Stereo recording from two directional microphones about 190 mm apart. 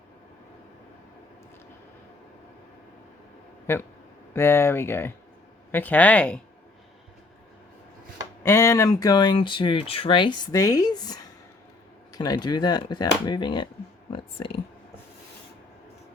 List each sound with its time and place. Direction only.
3.7 s speech: 15° left (ahead or behind)
8.4 s speech: 15° left (ahead or behind)
14.1 s a sound: 30° left (ahead or behind)